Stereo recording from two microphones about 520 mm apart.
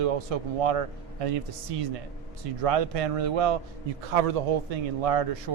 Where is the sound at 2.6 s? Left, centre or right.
Right.